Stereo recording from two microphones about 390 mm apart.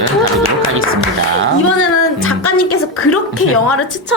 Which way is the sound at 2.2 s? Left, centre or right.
Left.